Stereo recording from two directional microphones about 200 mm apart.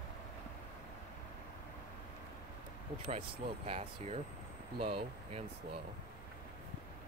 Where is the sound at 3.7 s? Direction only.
30° right (ahead or behind).